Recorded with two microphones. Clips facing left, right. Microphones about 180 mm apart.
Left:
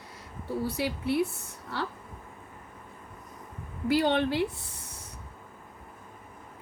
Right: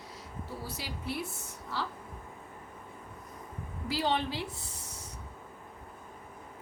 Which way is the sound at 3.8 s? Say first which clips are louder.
Left 6 dB; 60° left (ahead or behind).